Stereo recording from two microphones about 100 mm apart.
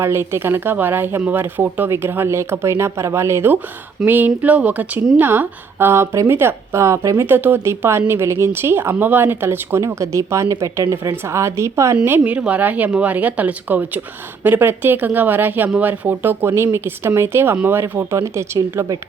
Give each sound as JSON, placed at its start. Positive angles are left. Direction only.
{"t": 0.0, "sound": "speech", "side_deg": -25}
{"t": 11.9, "sound": "speech", "side_deg": -20}